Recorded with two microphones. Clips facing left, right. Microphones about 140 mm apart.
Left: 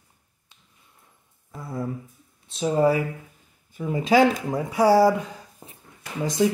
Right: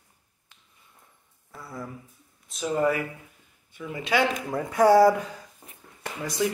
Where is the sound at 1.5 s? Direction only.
25° left (ahead or behind).